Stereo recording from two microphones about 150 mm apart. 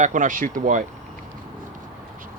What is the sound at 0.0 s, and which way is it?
Speech, 60° right (ahead or behind).